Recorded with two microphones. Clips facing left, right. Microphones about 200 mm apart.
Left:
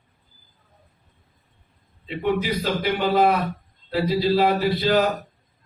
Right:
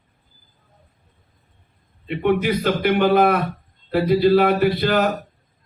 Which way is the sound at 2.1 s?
60° right (ahead or behind).